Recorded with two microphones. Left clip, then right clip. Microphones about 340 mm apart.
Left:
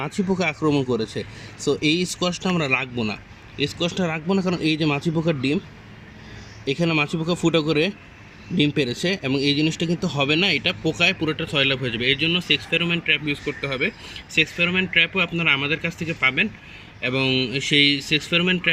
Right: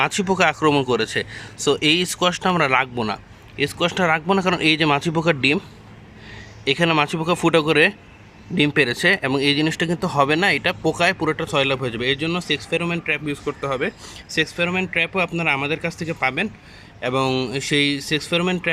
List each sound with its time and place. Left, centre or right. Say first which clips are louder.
0.0 s speech: right 6 dB; right
6.7 s speech: right 4 dB; right